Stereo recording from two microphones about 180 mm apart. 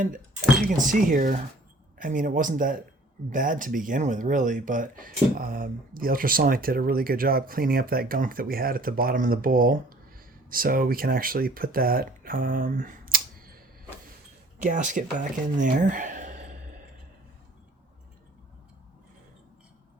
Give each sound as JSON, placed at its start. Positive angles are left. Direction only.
{"t": 0.8, "sound": "speech", "side_deg": -45}
{"t": 14.6, "sound": "speech", "side_deg": -45}